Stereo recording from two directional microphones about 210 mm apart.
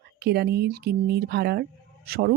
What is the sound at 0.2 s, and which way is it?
Speech, 50° right (ahead or behind).